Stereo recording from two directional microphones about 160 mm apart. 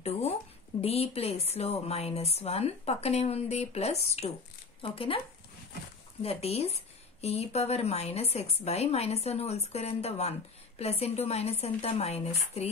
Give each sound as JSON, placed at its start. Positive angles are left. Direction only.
{"t": 0.0, "sound": "a woman's voice", "side_deg": 40}
{"t": 6.2, "sound": "a woman's voice", "side_deg": 40}